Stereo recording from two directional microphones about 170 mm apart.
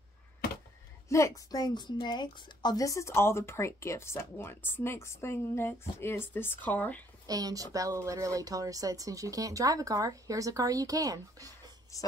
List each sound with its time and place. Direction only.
1.0 s a woman's voice: 15° left (ahead or behind)
7.2 s speech: 20° right (ahead or behind)
11.9 s a woman's voice: 20° left (ahead or behind)